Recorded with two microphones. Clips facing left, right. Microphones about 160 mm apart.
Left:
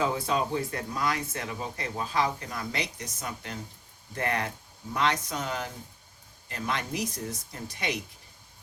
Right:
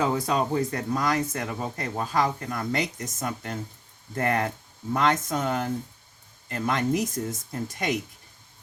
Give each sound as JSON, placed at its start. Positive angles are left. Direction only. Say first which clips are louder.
{"t": 0.0, "sound": "speech", "louder": "right 3 dB", "side_deg": -45}